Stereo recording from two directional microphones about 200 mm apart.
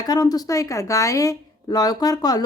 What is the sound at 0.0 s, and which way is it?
Speech, 20° left (ahead or behind).